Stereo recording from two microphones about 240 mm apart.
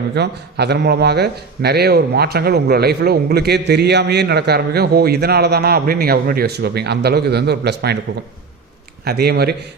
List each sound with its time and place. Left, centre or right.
0.2 s a man's voice: right
9.0 s a man's voice: right